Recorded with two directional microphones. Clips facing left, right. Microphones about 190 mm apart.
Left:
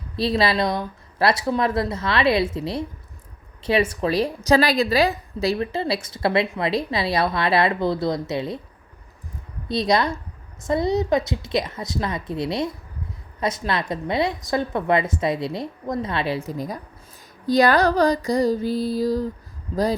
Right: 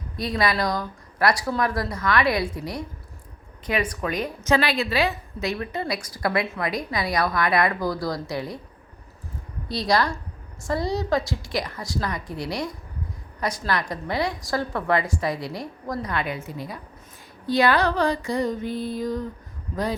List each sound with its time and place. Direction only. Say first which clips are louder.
0.2 s a woman's voice: left 4 dB; 25° left (ahead or behind)
9.6 s a woman's voice: left 2 dB; 20° left (ahead or behind)
16.5 s speech: left 5 dB; 40° left (ahead or behind)
17.4 s a sound: left 3 dB; 40° left (ahead or behind)